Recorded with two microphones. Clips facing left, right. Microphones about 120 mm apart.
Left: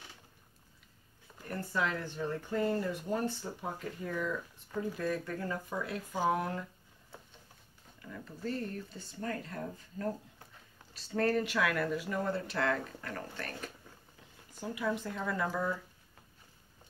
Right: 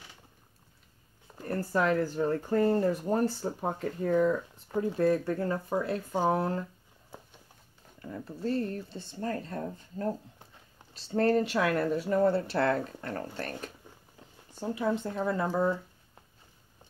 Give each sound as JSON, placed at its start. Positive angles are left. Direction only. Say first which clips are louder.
{"t": 1.4, "sound": "speech", "louder": "right 6 dB", "side_deg": -40}
{"t": 8.0, "sound": "speech", "louder": "right 6 dB", "side_deg": -30}